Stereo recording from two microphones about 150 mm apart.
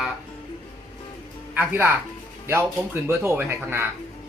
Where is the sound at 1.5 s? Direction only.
15° right (ahead or behind).